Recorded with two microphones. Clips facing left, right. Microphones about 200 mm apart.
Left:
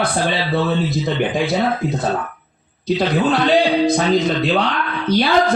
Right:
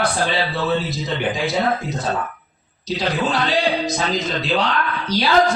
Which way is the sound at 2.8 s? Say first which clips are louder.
Left 5 dB; 55° left (ahead or behind).